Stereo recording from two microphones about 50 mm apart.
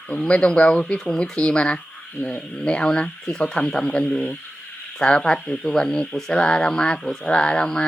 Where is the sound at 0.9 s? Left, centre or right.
Centre.